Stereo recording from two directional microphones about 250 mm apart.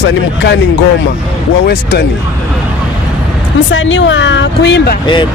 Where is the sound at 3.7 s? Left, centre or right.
Left.